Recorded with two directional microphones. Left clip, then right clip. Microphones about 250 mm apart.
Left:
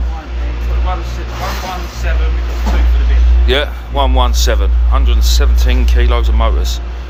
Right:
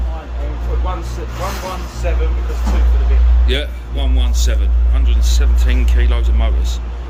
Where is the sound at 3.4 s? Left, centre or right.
Centre.